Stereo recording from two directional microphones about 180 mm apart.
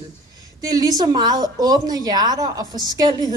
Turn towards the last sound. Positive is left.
turn(degrees=-20)  # may be behind; listen again after turning